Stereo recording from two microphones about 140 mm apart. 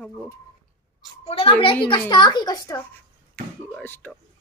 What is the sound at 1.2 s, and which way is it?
A child's voice, 45° left (ahead or behind).